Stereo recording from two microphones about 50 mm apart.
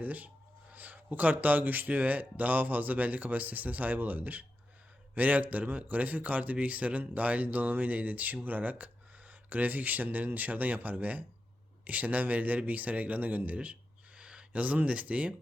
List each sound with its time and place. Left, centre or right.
0.0 s a man's voice: right
14.2 s speech: right